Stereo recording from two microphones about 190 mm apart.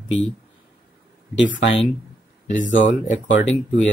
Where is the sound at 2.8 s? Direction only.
40° left (ahead or behind).